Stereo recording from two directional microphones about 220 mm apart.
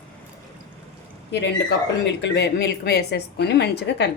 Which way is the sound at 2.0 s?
50° left (ahead or behind).